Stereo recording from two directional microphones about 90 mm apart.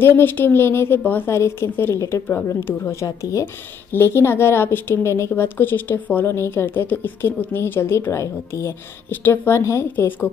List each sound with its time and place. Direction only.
0.0 s a woman's voice: 25° left (ahead or behind)
9.1 s a woman's voice: 20° left (ahead or behind)